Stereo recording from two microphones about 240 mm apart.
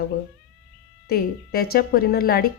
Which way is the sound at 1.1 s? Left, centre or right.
Left.